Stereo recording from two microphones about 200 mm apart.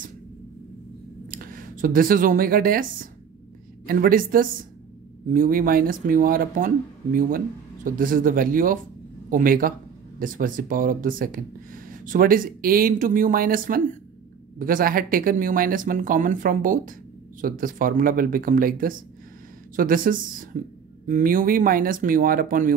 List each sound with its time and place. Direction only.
1.3 s speech: 45° right (ahead or behind)